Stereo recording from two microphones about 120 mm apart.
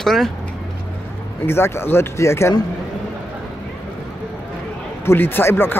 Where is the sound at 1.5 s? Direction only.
20° left (ahead or behind).